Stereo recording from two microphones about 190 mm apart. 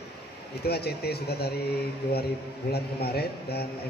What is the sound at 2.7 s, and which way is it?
Speech, 55° left (ahead or behind).